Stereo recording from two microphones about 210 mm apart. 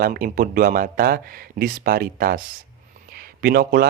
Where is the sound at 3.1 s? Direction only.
45° right (ahead or behind).